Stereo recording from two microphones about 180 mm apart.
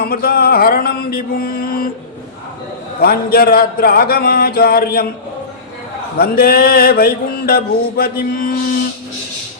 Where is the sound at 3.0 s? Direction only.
55° left (ahead or behind).